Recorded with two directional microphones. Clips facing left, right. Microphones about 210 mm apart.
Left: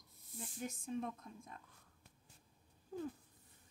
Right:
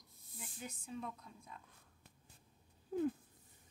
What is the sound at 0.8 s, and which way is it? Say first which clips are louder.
Speech: left 3 dB; 50° left (ahead or behind).